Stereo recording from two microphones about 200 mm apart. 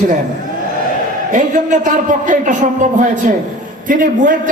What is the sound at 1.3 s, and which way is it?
A man's voice, 40° right (ahead or behind).